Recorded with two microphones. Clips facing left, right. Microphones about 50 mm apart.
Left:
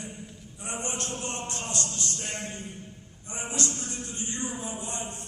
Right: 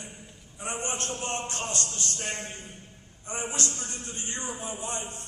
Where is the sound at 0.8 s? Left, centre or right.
Right.